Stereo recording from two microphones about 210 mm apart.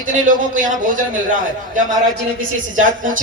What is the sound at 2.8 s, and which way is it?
Speech, 40° right (ahead or behind).